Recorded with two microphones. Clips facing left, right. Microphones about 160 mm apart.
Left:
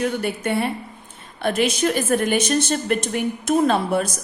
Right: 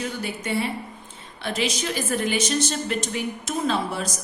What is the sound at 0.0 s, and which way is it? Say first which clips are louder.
A woman's voice: left 7 dB; 55° left (ahead or behind).